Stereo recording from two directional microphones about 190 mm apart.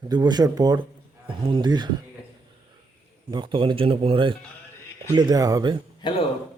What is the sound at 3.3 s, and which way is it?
Speech, 25° right (ahead or behind).